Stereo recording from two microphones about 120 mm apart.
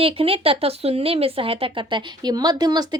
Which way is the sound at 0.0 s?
50° right (ahead or behind).